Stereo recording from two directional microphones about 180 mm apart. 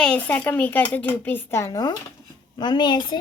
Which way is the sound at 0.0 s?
5° left (ahead or behind).